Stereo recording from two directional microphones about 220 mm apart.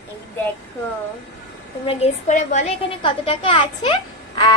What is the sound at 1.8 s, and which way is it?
A woman's voice, 30° left (ahead or behind).